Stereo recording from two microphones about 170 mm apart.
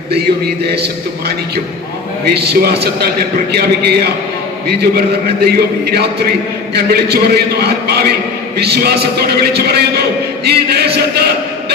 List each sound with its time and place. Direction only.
0.1 s a man's voice: 75° right (ahead or behind)
2.2 s a man's voice: 75° right (ahead or behind)